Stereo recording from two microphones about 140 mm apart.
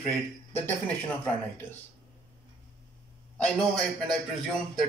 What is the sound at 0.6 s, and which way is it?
Speech, 10° left (ahead or behind).